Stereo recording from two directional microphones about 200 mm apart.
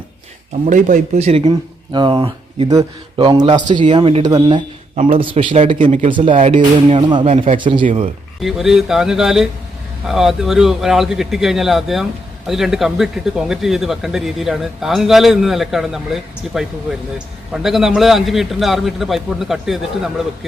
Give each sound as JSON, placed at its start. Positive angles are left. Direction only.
{"t": 0.7, "sound": "speech", "side_deg": -40}
{"t": 6.1, "sound": "speech", "side_deg": -25}
{"t": 8.4, "sound": "speech", "side_deg": 0}